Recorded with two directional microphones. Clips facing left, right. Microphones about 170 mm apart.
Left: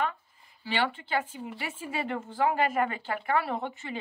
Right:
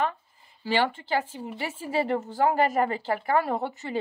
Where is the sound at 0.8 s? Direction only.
40° right (ahead or behind).